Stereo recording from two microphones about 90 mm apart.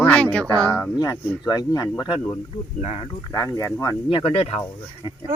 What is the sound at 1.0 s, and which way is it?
Speech, 45° left (ahead or behind).